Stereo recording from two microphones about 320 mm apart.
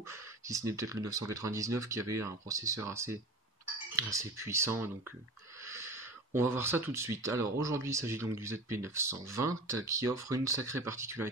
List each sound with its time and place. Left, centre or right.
0.1 s speech: centre